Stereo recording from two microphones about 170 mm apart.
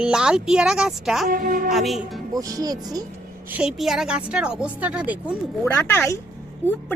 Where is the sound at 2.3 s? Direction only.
20° right (ahead or behind).